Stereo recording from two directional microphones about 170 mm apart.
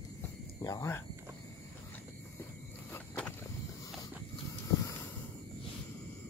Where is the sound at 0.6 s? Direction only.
20° left (ahead or behind).